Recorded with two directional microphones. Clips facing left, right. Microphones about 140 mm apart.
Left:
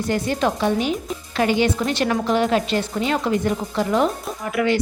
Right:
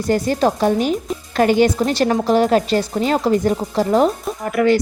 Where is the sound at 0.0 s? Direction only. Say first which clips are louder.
Right 4 dB; 40° right (ahead or behind).